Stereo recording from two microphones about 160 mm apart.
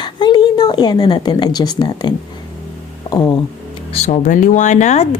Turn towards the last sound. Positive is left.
turn(degrees=45)  # may be behind; listen again after turning